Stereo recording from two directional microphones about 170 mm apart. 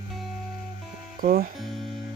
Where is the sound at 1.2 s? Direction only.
55° right (ahead or behind).